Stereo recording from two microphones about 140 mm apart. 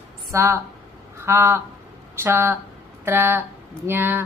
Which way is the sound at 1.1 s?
20° right (ahead or behind).